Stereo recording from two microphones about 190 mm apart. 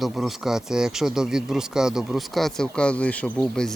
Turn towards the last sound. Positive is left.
turn(degrees=5)  # may be behind; listen again after turning